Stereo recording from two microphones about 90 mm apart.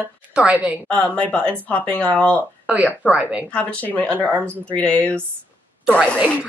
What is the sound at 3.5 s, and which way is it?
Speech, 15° left (ahead or behind).